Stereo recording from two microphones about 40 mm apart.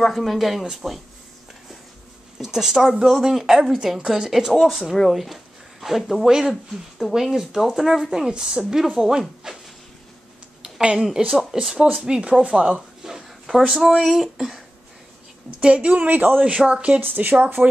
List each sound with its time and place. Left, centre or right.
0.1 s speech: centre
2.3 s a woman's voice: centre
6.2 s a woman's voice: centre
6.5 s speech: centre
7.2 s speech: centre
8.3 s a woman's voice: centre
9.5 s a sound: centre
11.1 s a woman's voice: centre
13.0 s a sound: centre
13.7 s a woman's voice: centre
15.6 s speech: right
16.2 s speech: right
16.4 s speech: right
17.0 s speech: right